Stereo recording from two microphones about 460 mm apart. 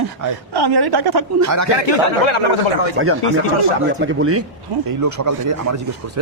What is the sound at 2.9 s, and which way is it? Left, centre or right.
Speech, right.